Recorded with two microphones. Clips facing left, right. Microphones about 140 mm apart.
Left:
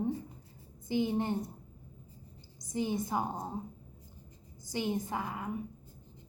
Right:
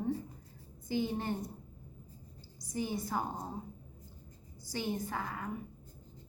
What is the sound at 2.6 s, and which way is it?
Speech, 20° left (ahead or behind).